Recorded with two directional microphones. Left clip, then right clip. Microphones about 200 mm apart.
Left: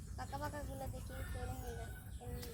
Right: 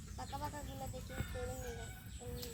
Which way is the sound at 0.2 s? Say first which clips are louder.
Even; centre (ahead or behind).